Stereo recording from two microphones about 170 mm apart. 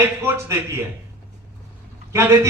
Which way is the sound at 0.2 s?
15° right (ahead or behind).